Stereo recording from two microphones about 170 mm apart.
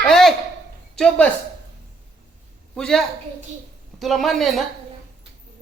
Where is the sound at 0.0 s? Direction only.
Centre (ahead or behind).